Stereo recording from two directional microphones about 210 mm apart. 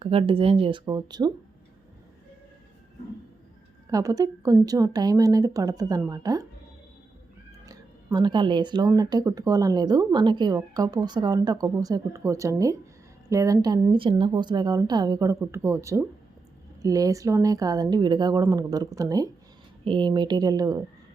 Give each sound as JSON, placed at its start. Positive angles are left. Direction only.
{"t": 0.0, "sound": "a woman's voice", "side_deg": -25}
{"t": 3.9, "sound": "speech", "side_deg": -15}
{"t": 7.6, "sound": "a woman's voice", "side_deg": -20}